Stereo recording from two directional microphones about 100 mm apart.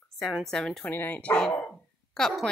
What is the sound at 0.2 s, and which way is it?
Speech, centre (ahead or behind).